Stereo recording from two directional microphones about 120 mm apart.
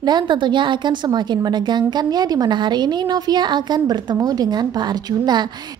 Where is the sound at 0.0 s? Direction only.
40° right (ahead or behind).